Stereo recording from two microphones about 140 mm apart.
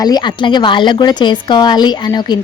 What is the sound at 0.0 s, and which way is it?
A woman's voice, 30° left (ahead or behind).